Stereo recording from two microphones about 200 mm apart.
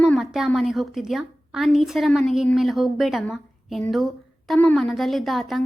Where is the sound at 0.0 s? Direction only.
5° right (ahead or behind).